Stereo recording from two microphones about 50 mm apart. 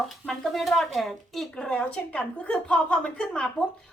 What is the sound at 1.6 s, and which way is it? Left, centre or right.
A woman's voice, centre.